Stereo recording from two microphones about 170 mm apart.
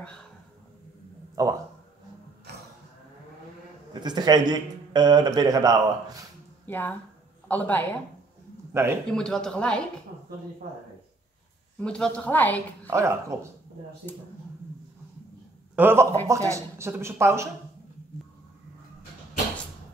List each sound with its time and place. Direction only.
1.3 s speech: 20° right (ahead or behind)
3.9 s a man's voice: 25° right (ahead or behind)
6.6 s speech: 10° left (ahead or behind)
8.7 s speech: 15° right (ahead or behind)
9.1 s a man's voice: 5° left (ahead or behind)
11.8 s a woman's voice: 5° left (ahead or behind)
12.9 s speech: 15° right (ahead or behind)
15.7 s a man's voice: 10° right (ahead or behind)